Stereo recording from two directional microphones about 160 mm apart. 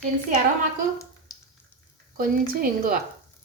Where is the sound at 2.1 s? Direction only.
60° right (ahead or behind).